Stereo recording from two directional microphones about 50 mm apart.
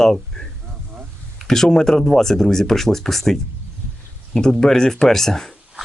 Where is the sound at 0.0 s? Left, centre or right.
Centre.